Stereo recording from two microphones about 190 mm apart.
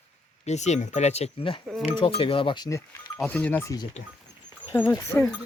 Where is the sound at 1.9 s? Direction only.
30° left (ahead or behind).